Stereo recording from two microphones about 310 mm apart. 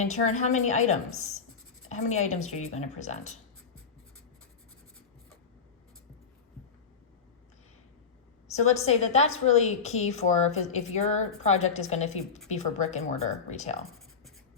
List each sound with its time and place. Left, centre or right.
0.0 s a woman's voice: left
8.5 s a woman's voice: left